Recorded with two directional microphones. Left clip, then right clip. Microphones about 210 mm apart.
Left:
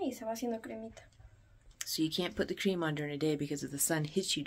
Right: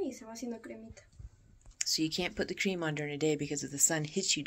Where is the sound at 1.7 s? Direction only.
5° left (ahead or behind).